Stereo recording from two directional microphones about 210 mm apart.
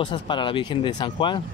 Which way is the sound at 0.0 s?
25° left (ahead or behind).